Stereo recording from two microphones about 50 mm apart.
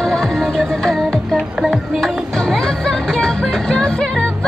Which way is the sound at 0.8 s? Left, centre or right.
Centre.